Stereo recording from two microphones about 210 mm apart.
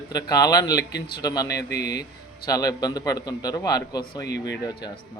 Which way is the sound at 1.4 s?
50° left (ahead or behind).